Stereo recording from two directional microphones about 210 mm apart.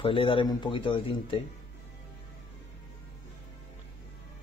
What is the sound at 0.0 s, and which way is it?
Speech, 25° left (ahead or behind).